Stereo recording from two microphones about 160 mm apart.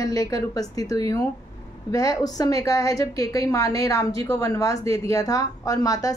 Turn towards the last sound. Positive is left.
turn(degrees=20)  # may be behind; listen again after turning